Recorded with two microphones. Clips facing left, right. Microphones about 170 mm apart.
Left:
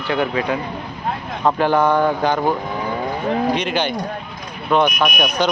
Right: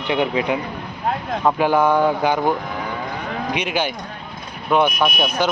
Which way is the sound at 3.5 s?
10° right (ahead or behind).